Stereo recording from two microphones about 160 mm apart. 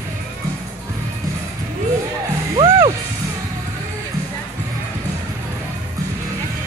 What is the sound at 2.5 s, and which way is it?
Music, 25° right (ahead or behind).